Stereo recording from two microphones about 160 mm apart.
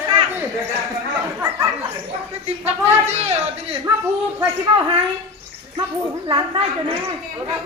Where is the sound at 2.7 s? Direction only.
45° right (ahead or behind).